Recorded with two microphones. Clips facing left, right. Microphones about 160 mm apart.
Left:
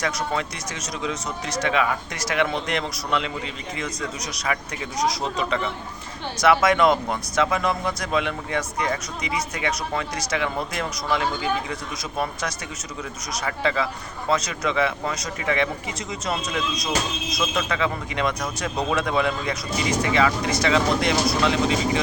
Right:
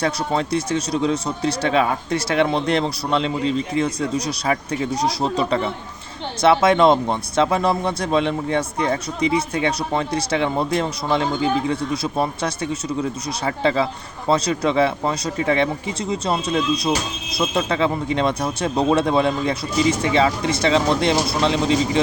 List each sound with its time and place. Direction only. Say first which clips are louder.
0.0 s a man's voice: right 4 dB; 30° right (ahead or behind)